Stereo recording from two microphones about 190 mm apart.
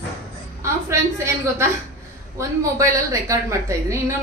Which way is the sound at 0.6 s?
15° right (ahead or behind).